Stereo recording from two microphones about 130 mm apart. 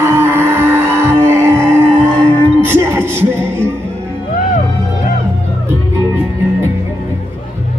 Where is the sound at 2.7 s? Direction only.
20° right (ahead or behind).